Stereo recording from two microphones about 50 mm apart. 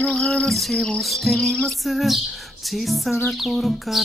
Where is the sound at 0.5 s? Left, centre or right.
Centre.